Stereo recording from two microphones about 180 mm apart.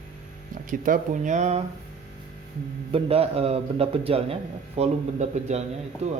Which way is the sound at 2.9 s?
30° right (ahead or behind).